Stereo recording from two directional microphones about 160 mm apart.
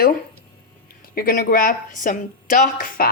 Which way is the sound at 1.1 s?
65° left (ahead or behind).